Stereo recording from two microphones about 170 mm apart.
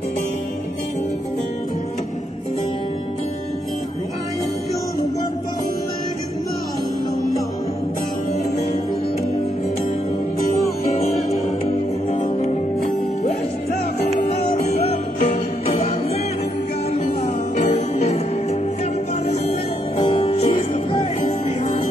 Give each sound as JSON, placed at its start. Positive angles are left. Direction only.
{"t": 12.1, "sound": "music", "side_deg": 45}
{"t": 15.1, "sound": "jingle bell", "side_deg": 45}
{"t": 17.6, "sound": "music", "side_deg": 40}
{"t": 20.0, "sound": "music", "side_deg": 35}